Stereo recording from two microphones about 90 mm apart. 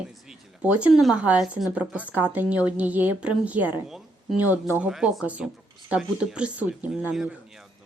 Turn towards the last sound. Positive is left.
turn(degrees=-5)  # may be behind; listen again after turning